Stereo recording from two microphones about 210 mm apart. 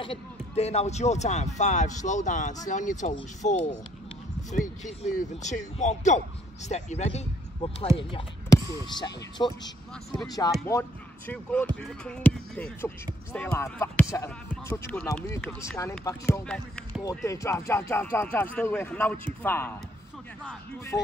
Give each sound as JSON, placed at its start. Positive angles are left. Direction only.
{"t": 0.6, "sound": "speech", "side_deg": 30}
{"t": 16.4, "sound": "speech", "side_deg": 5}
{"t": 20.9, "sound": "speech", "side_deg": 5}